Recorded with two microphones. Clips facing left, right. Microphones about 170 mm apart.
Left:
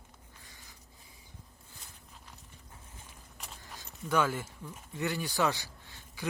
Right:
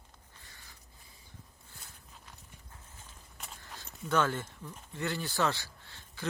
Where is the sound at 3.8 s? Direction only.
10° left (ahead or behind).